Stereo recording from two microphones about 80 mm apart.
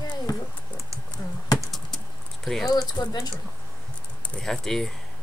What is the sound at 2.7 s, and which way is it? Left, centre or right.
Speech, left.